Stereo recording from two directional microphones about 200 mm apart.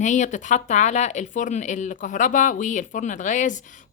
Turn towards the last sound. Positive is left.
turn(degrees=40)  # may be behind; listen again after turning